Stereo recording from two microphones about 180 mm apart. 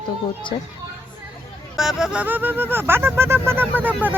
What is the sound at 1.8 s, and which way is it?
Speech, 5° right (ahead or behind).